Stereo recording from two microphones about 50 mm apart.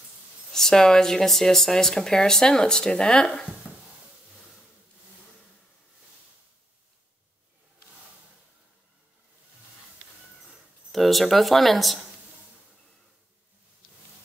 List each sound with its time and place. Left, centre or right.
0.5 s speech: centre
3.6 s stir: left
10.9 s speech: centre